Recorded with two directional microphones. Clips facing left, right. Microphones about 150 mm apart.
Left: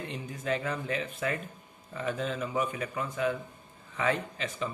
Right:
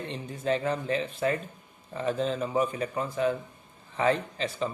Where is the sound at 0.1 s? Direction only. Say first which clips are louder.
Right 4 dB; 30° right (ahead or behind).